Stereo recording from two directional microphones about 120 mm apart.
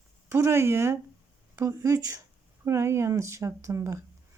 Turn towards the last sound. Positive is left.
turn(degrees=-25)  # may be behind; listen again after turning